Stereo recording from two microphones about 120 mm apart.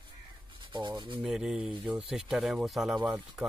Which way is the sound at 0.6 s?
40° right (ahead or behind).